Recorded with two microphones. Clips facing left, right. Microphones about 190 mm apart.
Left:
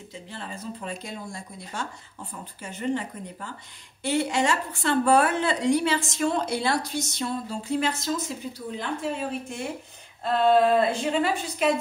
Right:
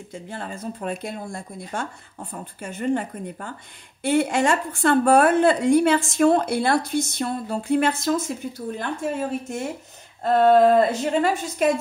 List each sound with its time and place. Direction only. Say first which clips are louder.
0.1 s a woman's voice: right 5 dB; 50° right (ahead or behind)